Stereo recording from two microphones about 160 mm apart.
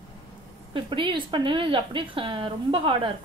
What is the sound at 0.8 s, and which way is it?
A woman's voice, 30° right (ahead or behind).